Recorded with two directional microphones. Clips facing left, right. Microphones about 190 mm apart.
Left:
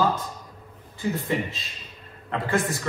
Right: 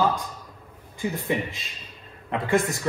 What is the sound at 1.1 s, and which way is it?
A man's voice, 15° right (ahead or behind).